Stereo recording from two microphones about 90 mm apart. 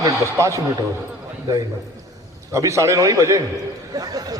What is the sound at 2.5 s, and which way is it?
A man's voice, 35° right (ahead or behind).